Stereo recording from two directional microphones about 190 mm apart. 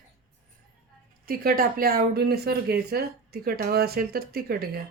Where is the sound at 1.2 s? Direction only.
50° right (ahead or behind).